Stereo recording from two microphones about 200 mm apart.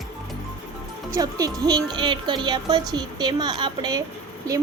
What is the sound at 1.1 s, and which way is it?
A woman's voice, 15° right (ahead or behind).